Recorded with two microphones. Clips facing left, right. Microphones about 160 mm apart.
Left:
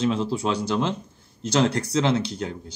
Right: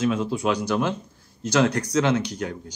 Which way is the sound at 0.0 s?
30° left (ahead or behind).